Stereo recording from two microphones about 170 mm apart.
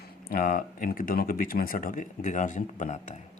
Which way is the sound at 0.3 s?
60° left (ahead or behind).